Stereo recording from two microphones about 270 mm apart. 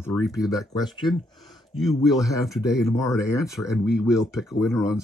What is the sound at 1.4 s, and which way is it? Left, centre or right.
Speech, centre.